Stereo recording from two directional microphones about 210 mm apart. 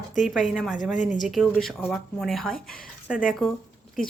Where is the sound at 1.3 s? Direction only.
Centre (ahead or behind).